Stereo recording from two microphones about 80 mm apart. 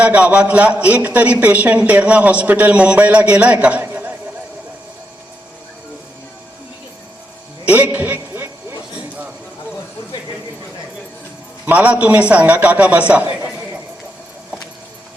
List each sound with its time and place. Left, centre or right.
0.0 s a man's voice: centre
7.7 s a man's voice: centre
11.6 s a man's voice: centre